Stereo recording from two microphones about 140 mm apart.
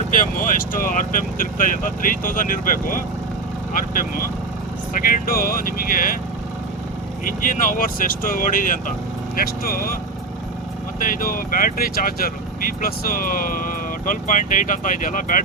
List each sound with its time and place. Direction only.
0.3 s speech: 80° left
4.9 s speech: 85° left
7.3 s speech: 75° left (ahead or behind)
9.4 s speech: 90° left
11.0 s speech: 85° left